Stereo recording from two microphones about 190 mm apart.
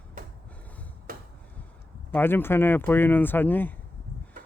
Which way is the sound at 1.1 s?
50° right (ahead or behind).